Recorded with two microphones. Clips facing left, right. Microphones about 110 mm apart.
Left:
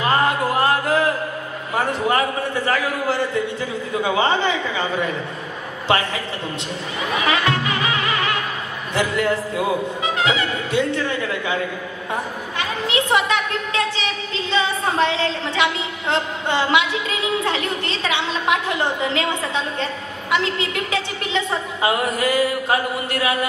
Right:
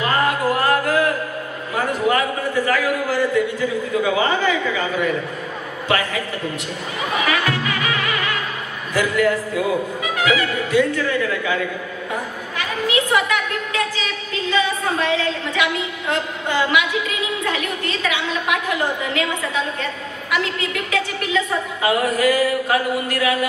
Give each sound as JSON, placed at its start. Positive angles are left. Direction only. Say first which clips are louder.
{"t": 0.1, "sound": "music", "louder": "even", "side_deg": 25}
{"t": 2.0, "sound": "a man's voice", "louder": "right 1 dB", "side_deg": 30}
{"t": 7.2, "sound": "music", "louder": "left 4 dB", "side_deg": 25}
{"t": 8.9, "sound": "a man's voice", "louder": "right 2 dB", "side_deg": 25}